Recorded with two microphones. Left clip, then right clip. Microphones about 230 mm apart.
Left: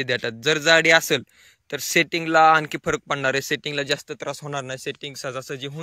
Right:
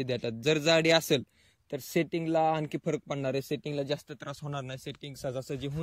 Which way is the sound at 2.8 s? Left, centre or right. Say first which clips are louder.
Left 9 dB; centre.